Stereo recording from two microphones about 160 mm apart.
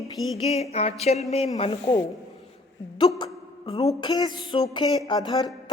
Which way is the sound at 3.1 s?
30° left (ahead or behind).